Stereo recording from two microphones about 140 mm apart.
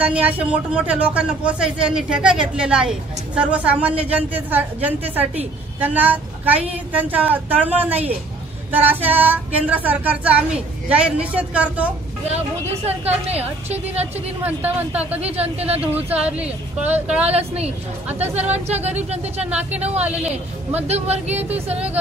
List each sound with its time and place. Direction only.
0.0 s speech: 10° right (ahead or behind)
12.3 s speech: 50° right (ahead or behind)
14.4 s speech: 10° right (ahead or behind)
15.1 s speech: 45° right (ahead or behind)
15.8 s speech: 10° right (ahead or behind)
17.3 s speech: 50° right (ahead or behind)
20.0 s speech: 10° right (ahead or behind)
20.8 s speech: 50° right (ahead or behind)